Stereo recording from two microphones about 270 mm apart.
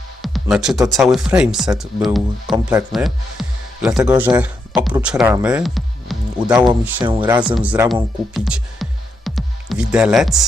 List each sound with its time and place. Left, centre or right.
0.2 s speech: centre
3.8 s speech: centre
6.5 s speech: centre
7.2 s speech: centre
8.3 s music: centre